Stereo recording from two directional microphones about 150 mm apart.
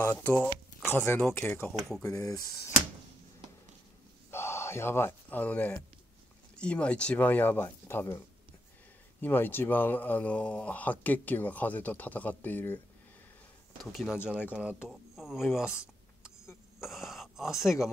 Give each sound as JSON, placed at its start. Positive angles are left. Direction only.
{"t": 0.0, "sound": "speech", "side_deg": 10}
{"t": 2.0, "sound": "speech", "side_deg": 25}
{"t": 4.3, "sound": "speech", "side_deg": 15}
{"t": 9.2, "sound": "speech", "side_deg": 15}
{"t": 13.9, "sound": "speech", "side_deg": -5}
{"t": 15.6, "sound": "a sound", "side_deg": 20}
{"t": 16.8, "sound": "speech", "side_deg": 0}